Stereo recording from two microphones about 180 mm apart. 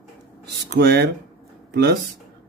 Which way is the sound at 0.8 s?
65° right (ahead or behind).